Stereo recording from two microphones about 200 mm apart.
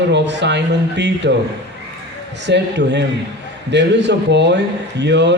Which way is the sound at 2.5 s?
60° right (ahead or behind).